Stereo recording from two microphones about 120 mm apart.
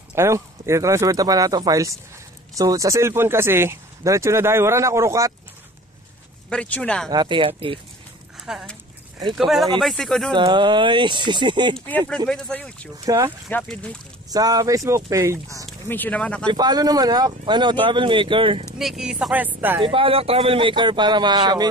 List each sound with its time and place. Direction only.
0.1 s speech: 25° right (ahead or behind)
6.5 s speech: 10° left (ahead or behind)
7.1 s speech: 40° right (ahead or behind)
8.5 s speech: 5° right (ahead or behind)
10.3 s speech: 40° right (ahead or behind)
11.7 s speech: 15° left (ahead or behind)
13.0 s speech: 30° right (ahead or behind)
13.5 s speech: 10° left (ahead or behind)
14.3 s speech: 30° right (ahead or behind)
15.9 s speech: 15° left (ahead or behind)
16.4 s speech: 35° right (ahead or behind)
18.8 s speech: 5° right (ahead or behind)
19.8 s speech: 45° right (ahead or behind)